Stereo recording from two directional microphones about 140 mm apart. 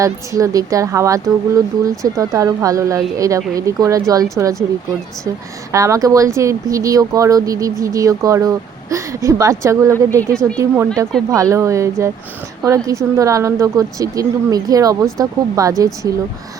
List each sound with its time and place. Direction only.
0.0 s speech: 25° right (ahead or behind)
5.7 s speech: 25° right (ahead or behind)
10.2 s speech: 5° left (ahead or behind)
10.6 s speech: 25° right (ahead or behind)